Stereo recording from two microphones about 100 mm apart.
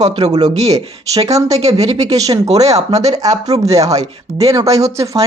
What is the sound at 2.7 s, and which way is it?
Speech, 90° right.